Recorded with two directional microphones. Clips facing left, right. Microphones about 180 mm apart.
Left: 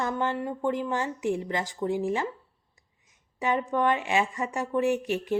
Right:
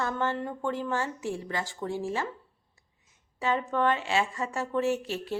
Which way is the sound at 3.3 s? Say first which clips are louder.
Left 2 dB; 15° left (ahead or behind).